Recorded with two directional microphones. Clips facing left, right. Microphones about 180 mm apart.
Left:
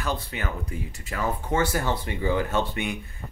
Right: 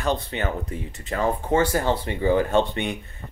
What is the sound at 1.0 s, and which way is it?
Speech, 30° right (ahead or behind).